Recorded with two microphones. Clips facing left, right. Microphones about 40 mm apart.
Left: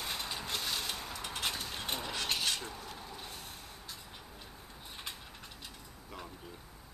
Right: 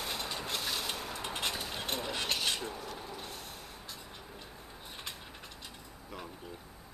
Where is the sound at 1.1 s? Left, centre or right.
Centre.